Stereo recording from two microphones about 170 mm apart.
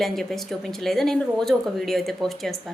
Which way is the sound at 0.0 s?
Centre (ahead or behind).